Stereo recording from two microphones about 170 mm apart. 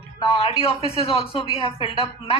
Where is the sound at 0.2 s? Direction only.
30° left (ahead or behind).